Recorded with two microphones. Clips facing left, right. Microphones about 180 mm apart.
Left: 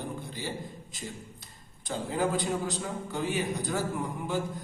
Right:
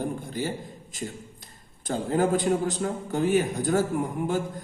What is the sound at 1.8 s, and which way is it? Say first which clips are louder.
A man's voice: right 5 dB; 50° right (ahead or behind).